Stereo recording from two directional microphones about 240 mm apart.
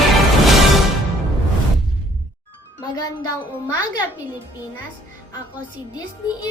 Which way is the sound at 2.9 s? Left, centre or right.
Centre.